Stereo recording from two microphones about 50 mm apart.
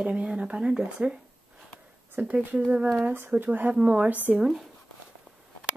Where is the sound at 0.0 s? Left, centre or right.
Right.